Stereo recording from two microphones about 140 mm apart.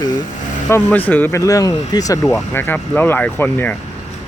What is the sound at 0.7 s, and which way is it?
Speech, 10° left (ahead or behind).